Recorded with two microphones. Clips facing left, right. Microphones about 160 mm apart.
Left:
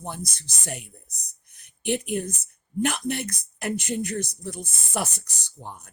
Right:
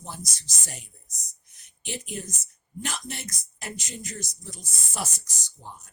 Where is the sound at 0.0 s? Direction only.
55° left (ahead or behind).